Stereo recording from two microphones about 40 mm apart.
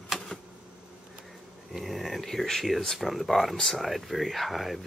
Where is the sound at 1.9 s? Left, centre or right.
Centre.